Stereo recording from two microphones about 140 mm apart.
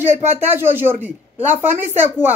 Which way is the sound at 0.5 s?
15° right (ahead or behind).